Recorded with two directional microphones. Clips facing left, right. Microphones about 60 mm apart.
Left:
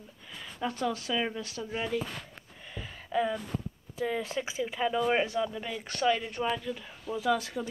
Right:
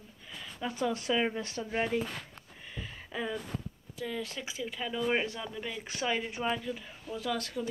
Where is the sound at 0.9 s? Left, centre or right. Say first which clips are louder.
Right 2 dB; right.